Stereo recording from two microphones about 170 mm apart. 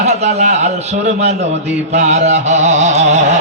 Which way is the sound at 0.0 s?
40° right (ahead or behind).